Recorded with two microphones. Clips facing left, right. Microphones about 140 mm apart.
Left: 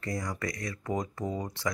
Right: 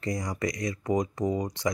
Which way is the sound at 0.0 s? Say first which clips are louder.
Right 4 dB; 20° right (ahead or behind).